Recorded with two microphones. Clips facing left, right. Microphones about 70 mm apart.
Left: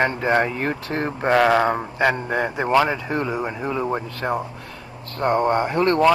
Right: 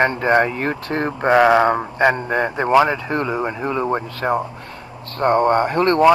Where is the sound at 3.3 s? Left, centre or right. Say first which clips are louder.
Right 3 dB; right.